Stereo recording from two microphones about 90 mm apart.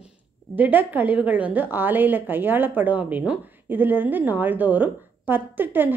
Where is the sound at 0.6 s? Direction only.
20° right (ahead or behind).